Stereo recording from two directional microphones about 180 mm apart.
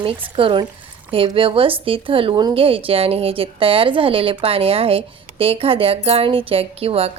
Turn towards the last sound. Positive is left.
turn(degrees=-35)  # may be behind; listen again after turning